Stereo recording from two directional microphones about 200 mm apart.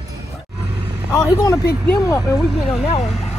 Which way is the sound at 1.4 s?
15° left (ahead or behind).